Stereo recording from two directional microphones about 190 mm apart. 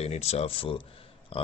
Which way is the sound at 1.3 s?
30° left (ahead or behind).